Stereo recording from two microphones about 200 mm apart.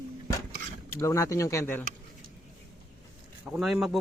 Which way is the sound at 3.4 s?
5° right (ahead or behind).